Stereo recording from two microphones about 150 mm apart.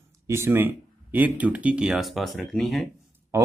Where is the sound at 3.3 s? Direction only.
20° right (ahead or behind).